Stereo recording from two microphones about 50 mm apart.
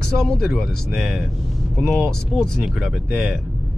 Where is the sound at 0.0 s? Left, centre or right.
Centre.